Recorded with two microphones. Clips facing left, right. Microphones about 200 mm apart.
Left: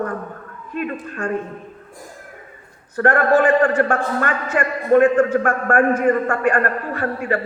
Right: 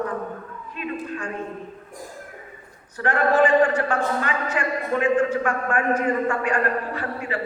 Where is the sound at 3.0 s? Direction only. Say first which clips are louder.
Left 4 dB; 50° left (ahead or behind).